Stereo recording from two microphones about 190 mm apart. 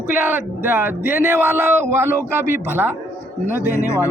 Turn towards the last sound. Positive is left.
turn(degrees=15)  # may be behind; listen again after turning